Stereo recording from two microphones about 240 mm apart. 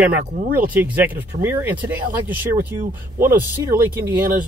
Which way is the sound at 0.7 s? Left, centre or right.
Centre.